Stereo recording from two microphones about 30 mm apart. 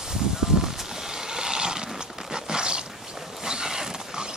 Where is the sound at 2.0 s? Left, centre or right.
Right.